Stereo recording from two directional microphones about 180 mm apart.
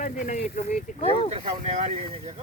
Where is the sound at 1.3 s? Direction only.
35° right (ahead or behind).